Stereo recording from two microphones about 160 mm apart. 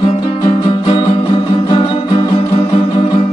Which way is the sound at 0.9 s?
30° left (ahead or behind).